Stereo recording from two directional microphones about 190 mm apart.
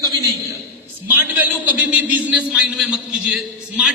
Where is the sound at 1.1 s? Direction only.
10° right (ahead or behind).